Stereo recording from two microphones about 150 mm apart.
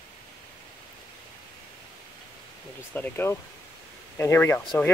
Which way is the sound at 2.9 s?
15° left (ahead or behind).